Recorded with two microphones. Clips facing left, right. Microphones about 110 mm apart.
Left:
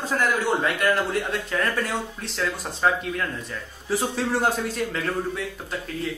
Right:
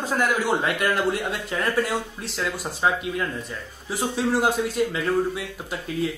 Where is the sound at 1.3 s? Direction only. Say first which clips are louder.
Even; 15° right (ahead or behind).